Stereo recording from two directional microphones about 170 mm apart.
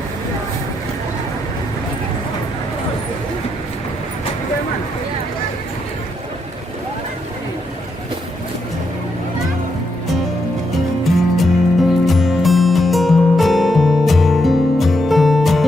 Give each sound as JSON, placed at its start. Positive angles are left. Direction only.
{"t": 11.0, "sound": "music", "side_deg": 0}